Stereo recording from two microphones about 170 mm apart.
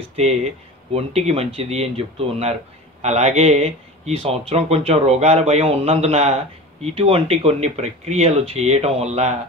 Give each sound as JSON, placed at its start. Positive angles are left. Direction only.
{"t": 0.1, "sound": "speech", "side_deg": -40}